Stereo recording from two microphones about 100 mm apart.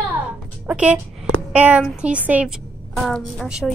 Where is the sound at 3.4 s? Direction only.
10° right (ahead or behind).